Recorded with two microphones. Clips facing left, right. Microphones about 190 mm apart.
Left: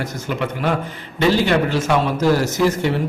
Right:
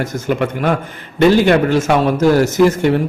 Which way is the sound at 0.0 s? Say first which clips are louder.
Right 6 dB; 50° right (ahead or behind).